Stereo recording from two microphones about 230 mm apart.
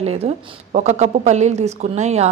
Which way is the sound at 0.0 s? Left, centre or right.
Right.